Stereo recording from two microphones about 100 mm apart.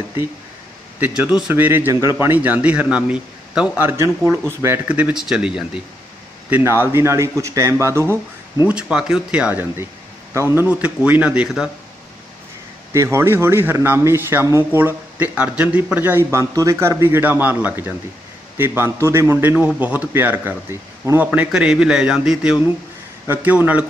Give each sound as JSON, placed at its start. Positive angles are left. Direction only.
{"t": 0.9, "sound": "speech", "side_deg": -15}
{"t": 3.8, "sound": "speech", "side_deg": -25}
{"t": 4.8, "sound": "speech", "side_deg": -15}
{"t": 6.5, "sound": "speech", "side_deg": -25}
{"t": 8.6, "sound": "speech", "side_deg": -10}
{"t": 10.7, "sound": "speech", "side_deg": -10}
{"t": 11.4, "sound": "speech", "side_deg": -5}
{"t": 12.9, "sound": "speech", "side_deg": -30}
{"t": 21.5, "sound": "speech", "side_deg": -5}
{"t": 23.2, "sound": "speech", "side_deg": -20}